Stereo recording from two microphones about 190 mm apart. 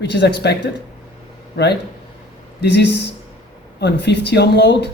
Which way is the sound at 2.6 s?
65° left (ahead or behind).